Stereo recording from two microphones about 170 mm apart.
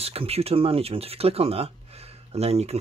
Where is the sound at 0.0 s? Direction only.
35° right (ahead or behind).